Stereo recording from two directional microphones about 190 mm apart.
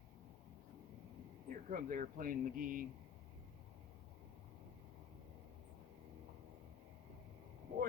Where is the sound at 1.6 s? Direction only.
45° right (ahead or behind).